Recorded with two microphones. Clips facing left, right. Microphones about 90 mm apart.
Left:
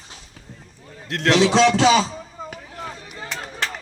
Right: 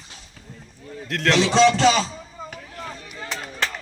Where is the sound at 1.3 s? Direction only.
5° left (ahead or behind).